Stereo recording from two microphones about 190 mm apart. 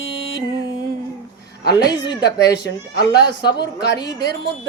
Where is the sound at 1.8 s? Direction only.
60° left (ahead or behind).